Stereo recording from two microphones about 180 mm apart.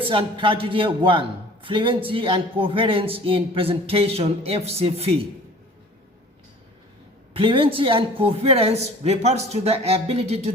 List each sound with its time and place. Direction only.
0.0 s a man's voice: 30° right (ahead or behind)
7.3 s a man's voice: 30° right (ahead or behind)